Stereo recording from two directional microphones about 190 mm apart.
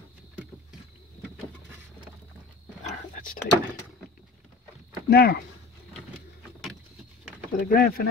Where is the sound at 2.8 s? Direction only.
45° left (ahead or behind).